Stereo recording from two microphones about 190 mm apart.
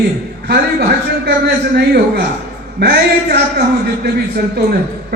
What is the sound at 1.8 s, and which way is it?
A man's voice, 55° right (ahead or behind).